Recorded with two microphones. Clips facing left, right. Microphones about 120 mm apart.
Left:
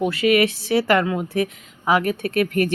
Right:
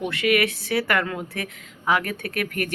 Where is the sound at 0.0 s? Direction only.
25° left (ahead or behind).